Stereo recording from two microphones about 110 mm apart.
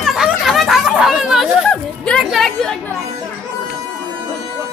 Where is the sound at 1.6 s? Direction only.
10° left (ahead or behind).